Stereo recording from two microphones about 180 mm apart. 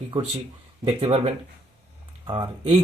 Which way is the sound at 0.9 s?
35° right (ahead or behind).